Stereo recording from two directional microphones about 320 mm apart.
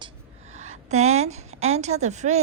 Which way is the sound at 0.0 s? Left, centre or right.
Right.